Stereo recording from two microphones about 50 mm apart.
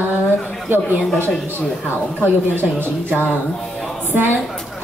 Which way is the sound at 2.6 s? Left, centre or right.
Right.